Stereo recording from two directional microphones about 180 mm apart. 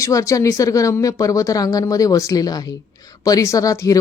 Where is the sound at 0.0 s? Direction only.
20° left (ahead or behind).